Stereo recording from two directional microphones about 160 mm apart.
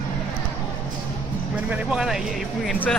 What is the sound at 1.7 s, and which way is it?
Speech, 5° right (ahead or behind).